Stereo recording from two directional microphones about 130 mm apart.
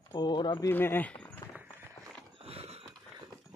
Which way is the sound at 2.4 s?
50° right (ahead or behind).